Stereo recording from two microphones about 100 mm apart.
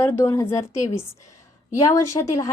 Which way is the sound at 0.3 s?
30° left (ahead or behind).